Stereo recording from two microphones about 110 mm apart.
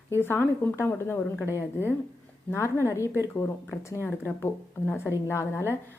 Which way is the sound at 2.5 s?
25° left (ahead or behind).